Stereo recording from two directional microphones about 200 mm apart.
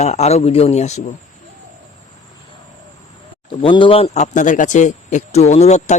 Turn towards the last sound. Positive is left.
turn(degrees=35)  # may be behind; listen again after turning